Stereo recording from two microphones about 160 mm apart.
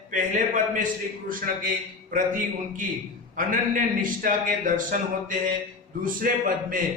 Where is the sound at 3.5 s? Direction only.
60° right (ahead or behind).